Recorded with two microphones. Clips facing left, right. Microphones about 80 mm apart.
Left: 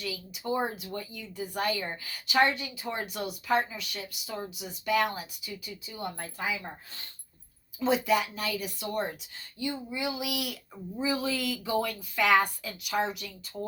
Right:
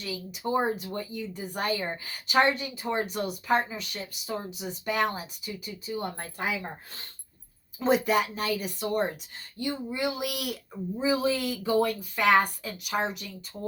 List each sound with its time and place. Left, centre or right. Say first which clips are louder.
0.0 s a woman's voice: right 3 dB; right
7.8 s a woman's voice: right 2 dB; right
11.0 s a woman's voice: right 4 dB; right